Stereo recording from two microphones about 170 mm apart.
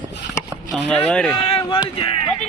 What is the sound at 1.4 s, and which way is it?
Speech, 35° left (ahead or behind).